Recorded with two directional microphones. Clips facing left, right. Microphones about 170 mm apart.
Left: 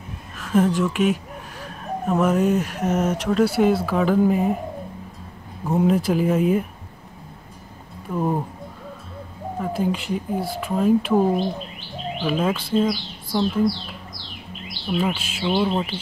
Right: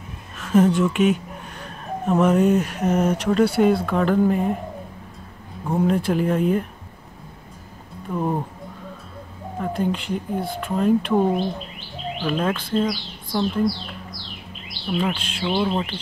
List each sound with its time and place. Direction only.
0.4 s speech: centre (ahead or behind)
5.7 s speech: 5° left (ahead or behind)
8.1 s speech: 5° left (ahead or behind)
9.6 s speech: 5° left (ahead or behind)
14.9 s speech: 5° left (ahead or behind)